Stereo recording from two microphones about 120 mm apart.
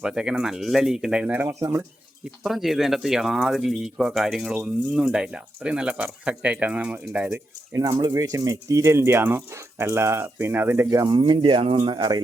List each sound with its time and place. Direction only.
0.0 s speech: 5° right (ahead or behind)
2.4 s speech: centre (ahead or behind)
7.8 s speech: 35° right (ahead or behind)
10.8 s speech: 35° right (ahead or behind)